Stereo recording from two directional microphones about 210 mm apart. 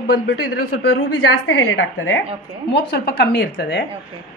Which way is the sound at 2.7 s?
55° left (ahead or behind).